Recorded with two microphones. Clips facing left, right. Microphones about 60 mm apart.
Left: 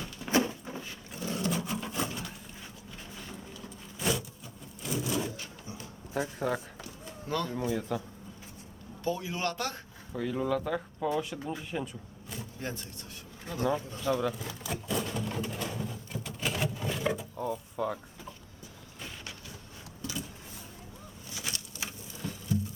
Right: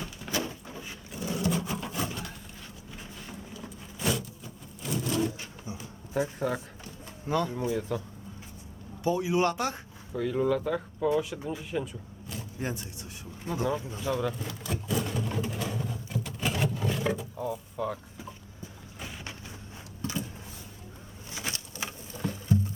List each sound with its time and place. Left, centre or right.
0.2 s a sound: centre
1.5 s wood: centre
4.0 s vehicle: centre
4.8 s wood: centre
5.7 s a sound: centre
7.3 s speech: centre
7.7 s speech: centre
9.0 s speech: centre
10.1 s speech: centre
12.5 s speech: centre
14.1 s vehicle: centre
20.0 s vehicle: right
21.3 s patter: right